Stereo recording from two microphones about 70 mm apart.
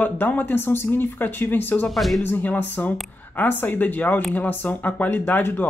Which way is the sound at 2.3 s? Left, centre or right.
Left.